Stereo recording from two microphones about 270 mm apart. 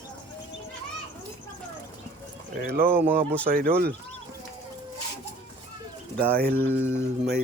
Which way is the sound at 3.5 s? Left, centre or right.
Right.